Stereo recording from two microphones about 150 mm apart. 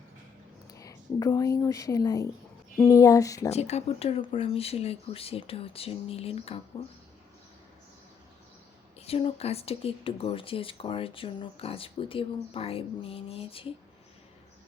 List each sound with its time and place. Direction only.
0.7 s a sound: 25° left (ahead or behind)
1.5 s speech: 20° left (ahead or behind)
3.5 s speech: 45° left (ahead or behind)
9.0 s speech: 40° left (ahead or behind)